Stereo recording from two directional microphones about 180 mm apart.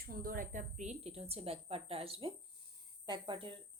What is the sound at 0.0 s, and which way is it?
A woman's voice, 55° right (ahead or behind).